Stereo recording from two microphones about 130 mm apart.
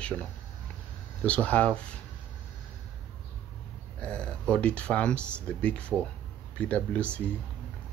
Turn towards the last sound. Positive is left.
turn(degrees=10)  # may be behind; listen again after turning